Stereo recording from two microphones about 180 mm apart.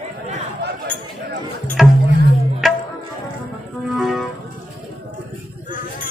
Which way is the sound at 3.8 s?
Centre (ahead or behind).